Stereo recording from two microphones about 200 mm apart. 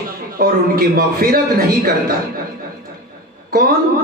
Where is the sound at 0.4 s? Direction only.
50° right (ahead or behind).